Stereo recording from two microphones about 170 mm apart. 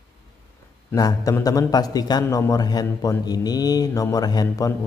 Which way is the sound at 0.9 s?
20° left (ahead or behind).